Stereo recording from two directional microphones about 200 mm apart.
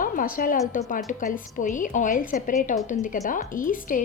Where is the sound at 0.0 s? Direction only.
45° left (ahead or behind).